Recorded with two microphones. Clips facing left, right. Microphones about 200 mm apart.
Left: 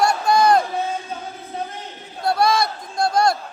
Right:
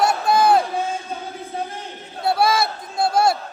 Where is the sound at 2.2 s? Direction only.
5° right (ahead or behind).